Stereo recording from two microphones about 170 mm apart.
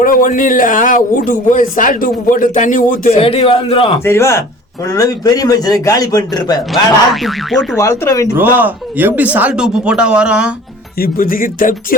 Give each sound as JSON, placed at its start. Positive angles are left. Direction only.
{"t": 0.0, "sound": "a man's voice", "side_deg": 55}
{"t": 3.2, "sound": "a man's voice", "side_deg": 35}
{"t": 4.0, "sound": "a man's voice", "side_deg": 15}
{"t": 7.1, "sound": "speech", "side_deg": 0}
{"t": 7.8, "sound": "a man's voice", "side_deg": 20}
{"t": 8.4, "sound": "speech", "side_deg": -10}
{"t": 10.9, "sound": "speech", "side_deg": 60}